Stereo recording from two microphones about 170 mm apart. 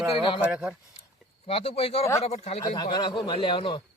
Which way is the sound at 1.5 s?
35° left (ahead or behind).